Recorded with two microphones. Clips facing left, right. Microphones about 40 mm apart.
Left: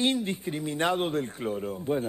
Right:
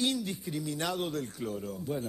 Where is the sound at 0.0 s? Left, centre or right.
Left.